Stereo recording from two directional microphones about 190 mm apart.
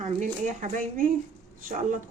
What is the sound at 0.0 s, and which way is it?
Speech, 40° right (ahead or behind).